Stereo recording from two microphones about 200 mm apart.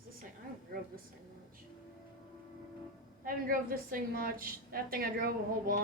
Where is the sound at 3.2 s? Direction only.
45° right (ahead or behind).